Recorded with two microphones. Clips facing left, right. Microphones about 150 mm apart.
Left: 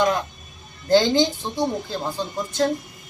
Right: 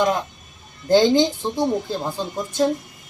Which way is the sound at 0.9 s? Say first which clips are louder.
Right 2 dB; 15° right (ahead or behind).